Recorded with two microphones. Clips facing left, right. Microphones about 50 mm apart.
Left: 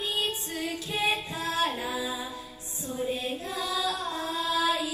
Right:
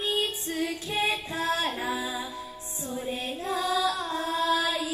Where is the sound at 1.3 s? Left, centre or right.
Right.